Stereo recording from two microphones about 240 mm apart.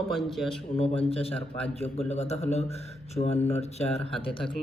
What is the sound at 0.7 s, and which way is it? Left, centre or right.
Speech, left.